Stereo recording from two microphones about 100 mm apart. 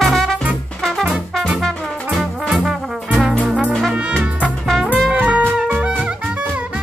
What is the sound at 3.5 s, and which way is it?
Brass instrument, 10° right (ahead or behind).